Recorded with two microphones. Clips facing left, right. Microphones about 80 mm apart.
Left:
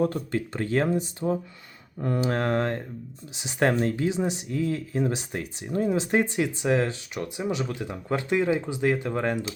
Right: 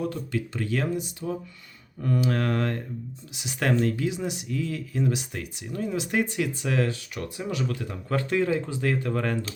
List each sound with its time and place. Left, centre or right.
0.0 s speech: left; by 9.5 s centre